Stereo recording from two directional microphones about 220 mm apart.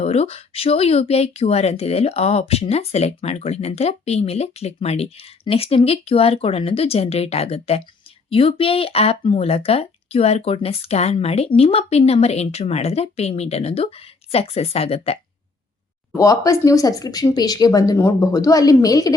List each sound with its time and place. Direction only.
0.0 s speech: 30° left (ahead or behind)
16.1 s speech: 15° left (ahead or behind)